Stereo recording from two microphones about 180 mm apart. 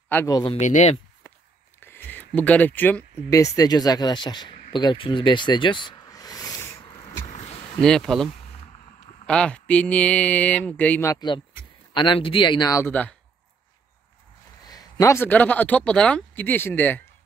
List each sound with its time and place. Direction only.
0.1 s speech: 15° left (ahead or behind)
0.6 s speech: 40° left (ahead or behind)
1.8 s a sound: 10° left (ahead or behind)
3.3 s speech: 20° left (ahead or behind)
7.8 s speech: 5° left (ahead or behind)
14.7 s speech: 20° left (ahead or behind)